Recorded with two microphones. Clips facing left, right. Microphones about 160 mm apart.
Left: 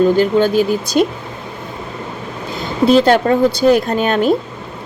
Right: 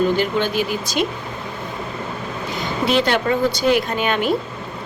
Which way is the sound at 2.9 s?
40° left (ahead or behind).